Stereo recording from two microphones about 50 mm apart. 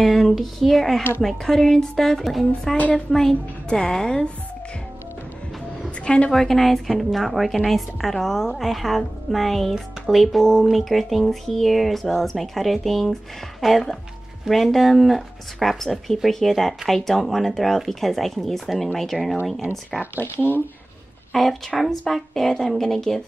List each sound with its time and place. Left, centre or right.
0.0 s a woman's voice: centre
3.6 s a woman's voice: centre
6.0 s a woman's voice: left
6.3 s a woman's voice: centre
19.9 s a woman's voice: centre
21.3 s a woman's voice: centre